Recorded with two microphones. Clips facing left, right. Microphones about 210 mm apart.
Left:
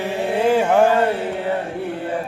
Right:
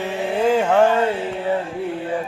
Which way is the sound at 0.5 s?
10° left (ahead or behind).